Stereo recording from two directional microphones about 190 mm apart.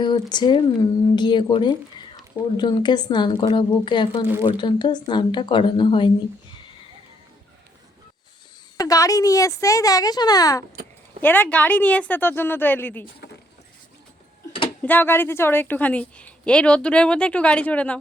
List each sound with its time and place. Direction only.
0.0 s speech: 25° left (ahead or behind)
8.8 s a woman's voice: 20° left (ahead or behind)
13.1 s keys jangling: 60° left (ahead or behind)
14.8 s a woman's voice: 10° left (ahead or behind)